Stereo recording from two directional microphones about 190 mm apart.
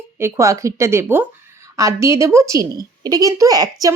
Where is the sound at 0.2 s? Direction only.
15° right (ahead or behind).